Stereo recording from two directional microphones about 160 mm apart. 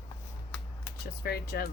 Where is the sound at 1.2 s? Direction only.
75° left (ahead or behind).